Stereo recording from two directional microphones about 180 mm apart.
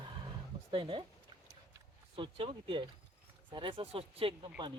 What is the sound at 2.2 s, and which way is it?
Speech, 30° right (ahead or behind).